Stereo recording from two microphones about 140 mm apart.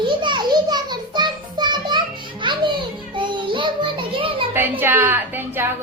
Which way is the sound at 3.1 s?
35° right (ahead or behind).